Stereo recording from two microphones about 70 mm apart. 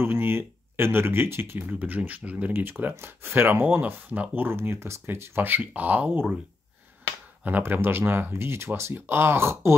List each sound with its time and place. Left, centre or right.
0.0 s speech: right
1.8 s speech: right
7.4 s speech: right